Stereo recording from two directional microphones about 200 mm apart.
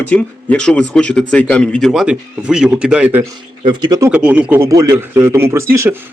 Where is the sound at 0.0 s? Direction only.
10° left (ahead or behind); by 3.2 s 10° right (ahead or behind).